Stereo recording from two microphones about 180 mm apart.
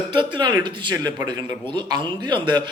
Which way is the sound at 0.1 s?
25° right (ahead or behind).